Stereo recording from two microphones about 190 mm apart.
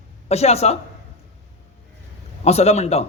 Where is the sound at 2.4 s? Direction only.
35° left (ahead or behind).